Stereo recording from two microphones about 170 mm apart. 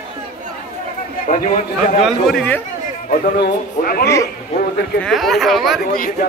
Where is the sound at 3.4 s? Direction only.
65° left (ahead or behind).